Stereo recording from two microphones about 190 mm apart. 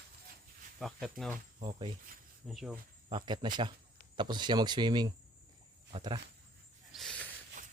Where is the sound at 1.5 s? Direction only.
30° right (ahead or behind).